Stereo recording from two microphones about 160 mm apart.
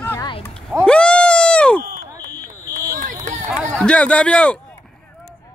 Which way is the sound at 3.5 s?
5° left (ahead or behind).